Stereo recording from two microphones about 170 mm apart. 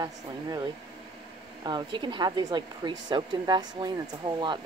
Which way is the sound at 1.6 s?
25° right (ahead or behind).